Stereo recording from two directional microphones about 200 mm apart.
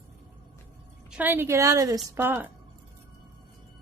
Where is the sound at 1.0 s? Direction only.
5° right (ahead or behind).